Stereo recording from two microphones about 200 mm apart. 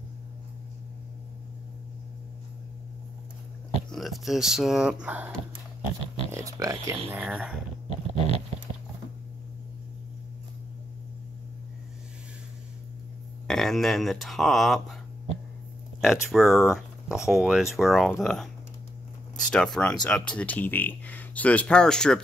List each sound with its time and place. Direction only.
3.9 s speech: centre (ahead or behind)
6.3 s speech: 15° right (ahead or behind)
13.5 s speech: centre (ahead or behind)
16.0 s speech: centre (ahead or behind)